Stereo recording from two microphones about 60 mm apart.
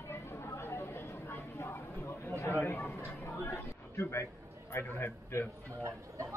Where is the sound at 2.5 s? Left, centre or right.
Left.